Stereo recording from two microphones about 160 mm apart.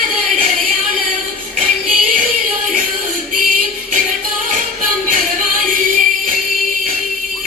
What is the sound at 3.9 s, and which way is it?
Music, 55° right (ahead or behind).